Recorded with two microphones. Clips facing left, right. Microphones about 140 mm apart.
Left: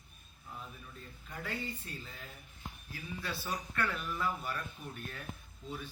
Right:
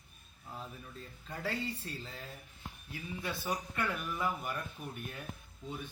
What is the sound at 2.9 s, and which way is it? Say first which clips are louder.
A man's voice: right 2 dB; 20° right (ahead or behind).